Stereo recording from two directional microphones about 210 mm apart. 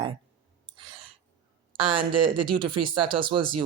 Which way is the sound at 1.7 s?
25° right (ahead or behind).